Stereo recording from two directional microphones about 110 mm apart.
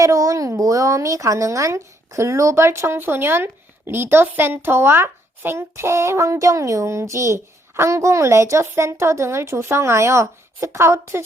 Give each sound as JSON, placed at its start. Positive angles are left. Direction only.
{"t": 0.0, "sound": "a child's voice", "side_deg": -30}